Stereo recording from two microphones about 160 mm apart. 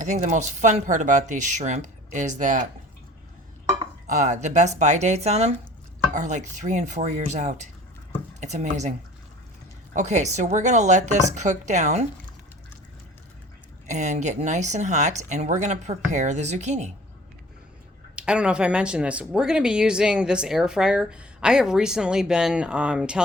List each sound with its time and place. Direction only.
0.0 s speech: 50° right (ahead or behind)
4.0 s speech: 50° right (ahead or behind)
9.9 s speech: 50° right (ahead or behind)
13.8 s speech: 50° right (ahead or behind)
18.2 s speech: 5° right (ahead or behind)